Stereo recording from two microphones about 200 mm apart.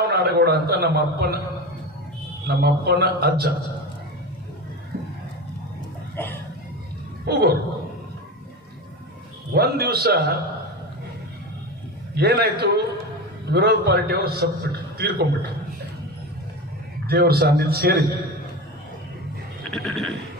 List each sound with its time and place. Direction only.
0.1 s a man's voice: 50° right (ahead or behind)
2.4 s a man's voice: 55° right (ahead or behind)
7.2 s a man's voice: 50° right (ahead or behind)
9.5 s a man's voice: 50° right (ahead or behind)
12.2 s a man's voice: 50° right (ahead or behind)
17.0 s a man's voice: 50° right (ahead or behind)
19.6 s a sound: centre (ahead or behind)